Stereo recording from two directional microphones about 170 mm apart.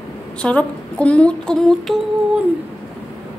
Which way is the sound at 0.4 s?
5° left (ahead or behind).